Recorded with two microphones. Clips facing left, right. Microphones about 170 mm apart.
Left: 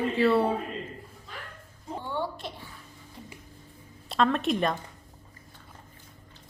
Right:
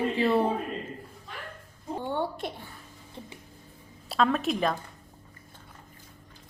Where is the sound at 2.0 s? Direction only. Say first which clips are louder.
Right 2 dB; 55° right (ahead or behind).